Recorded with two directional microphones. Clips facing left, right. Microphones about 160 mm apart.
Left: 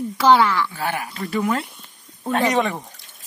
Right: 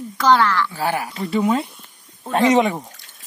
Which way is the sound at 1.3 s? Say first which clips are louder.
Right 3 dB; 20° right (ahead or behind).